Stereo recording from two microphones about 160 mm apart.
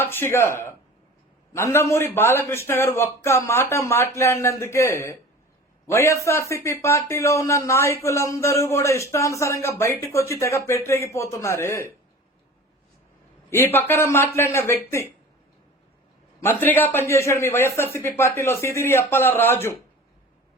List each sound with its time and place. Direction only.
0.0 s speech: 15° left (ahead or behind)
13.5 s speech: 15° left (ahead or behind)
16.4 s speech: 15° left (ahead or behind)